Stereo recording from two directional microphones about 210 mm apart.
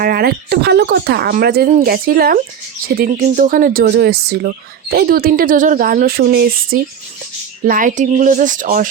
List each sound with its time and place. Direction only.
0.0 s speech: 45° right (ahead or behind)